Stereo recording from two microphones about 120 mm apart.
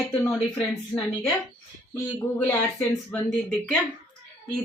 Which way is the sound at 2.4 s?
20° left (ahead or behind).